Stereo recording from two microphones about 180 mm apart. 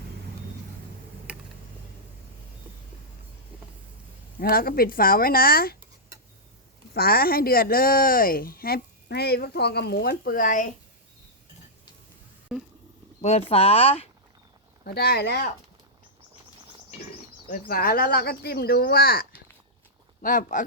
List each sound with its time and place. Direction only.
4.4 s speech: 55° left (ahead or behind)
6.9 s speech: 55° left (ahead or behind)
12.5 s a sound: 5° right (ahead or behind)
13.2 s speech: 35° left (ahead or behind)
14.8 s speech: 60° left (ahead or behind)
17.5 s speech: 55° left (ahead or behind)
20.2 s speech: 45° left (ahead or behind)